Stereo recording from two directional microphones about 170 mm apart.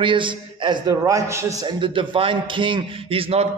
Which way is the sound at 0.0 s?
30° right (ahead or behind).